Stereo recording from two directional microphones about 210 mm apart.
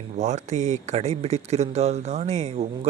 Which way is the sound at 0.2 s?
35° right (ahead or behind).